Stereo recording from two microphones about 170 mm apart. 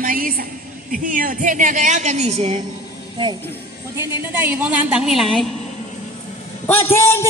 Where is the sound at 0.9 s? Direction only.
55° right (ahead or behind); by 2.6 s 40° right (ahead or behind).